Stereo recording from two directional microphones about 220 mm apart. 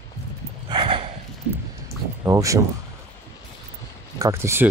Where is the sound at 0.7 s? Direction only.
25° right (ahead or behind).